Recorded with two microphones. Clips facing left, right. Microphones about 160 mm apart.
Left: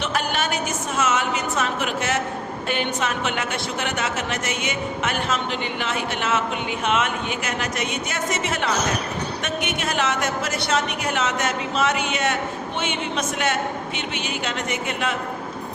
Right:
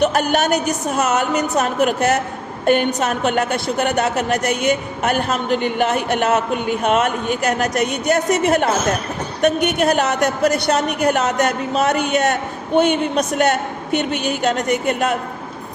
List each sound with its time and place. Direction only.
0.0 s a woman's voice: 45° right (ahead or behind)